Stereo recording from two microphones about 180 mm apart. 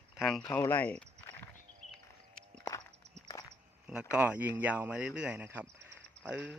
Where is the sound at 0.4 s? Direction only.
15° left (ahead or behind).